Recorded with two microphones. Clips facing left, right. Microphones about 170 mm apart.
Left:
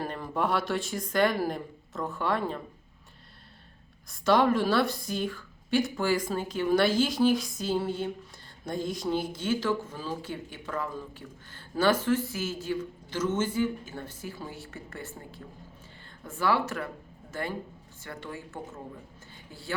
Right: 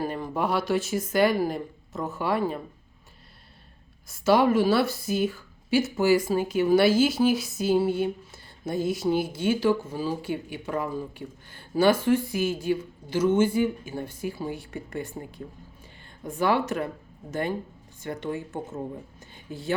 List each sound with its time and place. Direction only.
0.0 s speech: centre (ahead or behind)
4.1 s speech: 5° right (ahead or behind)
18.0 s speech: 20° right (ahead or behind)